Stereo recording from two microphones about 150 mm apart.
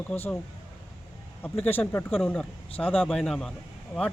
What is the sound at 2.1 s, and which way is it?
A man's voice, 5° left (ahead or behind).